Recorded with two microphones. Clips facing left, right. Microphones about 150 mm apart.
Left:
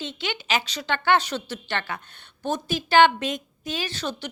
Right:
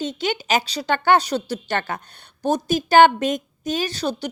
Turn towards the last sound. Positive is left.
turn(degrees=-35)  # may be behind; listen again after turning